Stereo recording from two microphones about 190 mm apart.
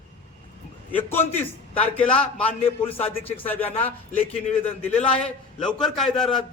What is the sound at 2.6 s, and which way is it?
Speech, 30° left (ahead or behind).